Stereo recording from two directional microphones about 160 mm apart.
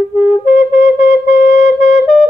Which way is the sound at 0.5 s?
45° left (ahead or behind).